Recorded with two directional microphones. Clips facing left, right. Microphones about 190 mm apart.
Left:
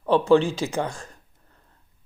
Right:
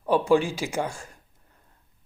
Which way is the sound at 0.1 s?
10° right (ahead or behind).